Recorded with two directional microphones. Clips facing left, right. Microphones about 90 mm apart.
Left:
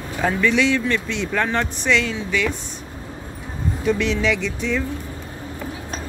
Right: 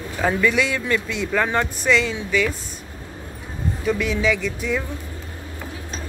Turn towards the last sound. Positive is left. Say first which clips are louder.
# even
turn(degrees=-5)  # may be behind; listen again after turning